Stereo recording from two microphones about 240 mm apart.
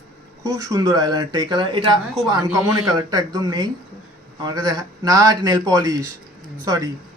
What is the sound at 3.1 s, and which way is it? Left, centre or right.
A man's voice, centre.